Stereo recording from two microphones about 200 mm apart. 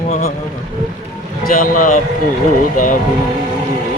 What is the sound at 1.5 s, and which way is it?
Speech, 45° left (ahead or behind).